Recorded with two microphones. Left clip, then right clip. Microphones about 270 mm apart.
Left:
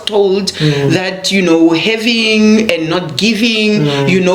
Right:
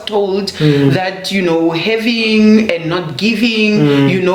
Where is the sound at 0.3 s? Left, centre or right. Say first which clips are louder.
Left 1 dB; left.